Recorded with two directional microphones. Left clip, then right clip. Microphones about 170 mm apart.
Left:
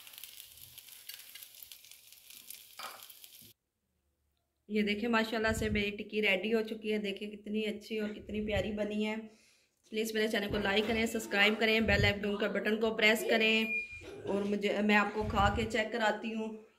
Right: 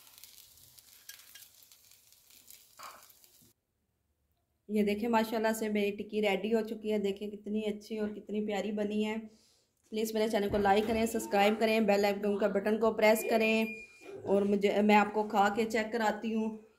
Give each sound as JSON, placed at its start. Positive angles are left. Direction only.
{"t": 4.7, "sound": "a woman's voice", "side_deg": -55}
{"t": 8.3, "sound": "a woman's voice", "side_deg": -60}